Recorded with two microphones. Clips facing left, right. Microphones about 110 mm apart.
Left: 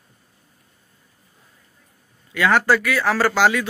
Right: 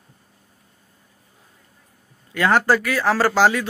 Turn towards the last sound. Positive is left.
turn(degrees=-35)  # may be behind; listen again after turning